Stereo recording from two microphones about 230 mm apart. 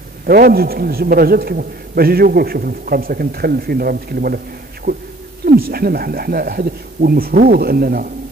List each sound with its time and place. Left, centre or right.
0.3 s a man's voice: right